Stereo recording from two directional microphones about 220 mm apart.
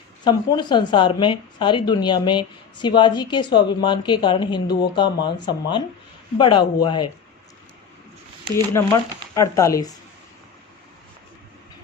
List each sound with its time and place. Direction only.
0.3 s speech: 20° left (ahead or behind)
8.5 s speech: 15° left (ahead or behind)